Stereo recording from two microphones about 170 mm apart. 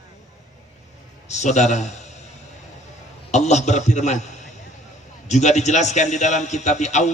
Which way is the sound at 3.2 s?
40° left (ahead or behind).